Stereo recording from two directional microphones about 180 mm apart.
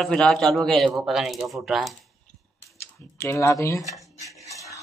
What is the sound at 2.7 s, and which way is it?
Speech, 15° left (ahead or behind).